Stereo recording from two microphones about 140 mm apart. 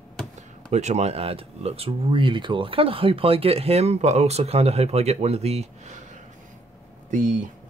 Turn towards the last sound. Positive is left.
turn(degrees=-60)  # may be behind; listen again after turning